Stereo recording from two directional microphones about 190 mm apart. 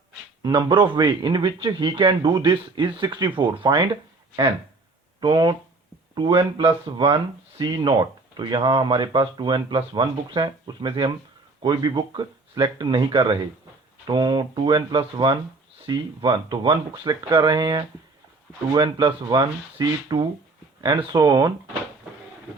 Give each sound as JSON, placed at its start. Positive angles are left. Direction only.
{"t": 0.4, "sound": "speech", "side_deg": -20}
{"t": 5.2, "sound": "speech", "side_deg": -25}